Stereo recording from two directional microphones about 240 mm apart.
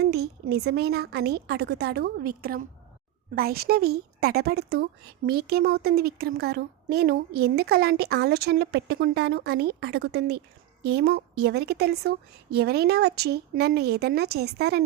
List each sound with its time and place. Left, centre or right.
0.0 s a woman's voice: right